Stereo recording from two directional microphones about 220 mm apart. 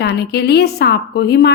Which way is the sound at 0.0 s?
50° left (ahead or behind).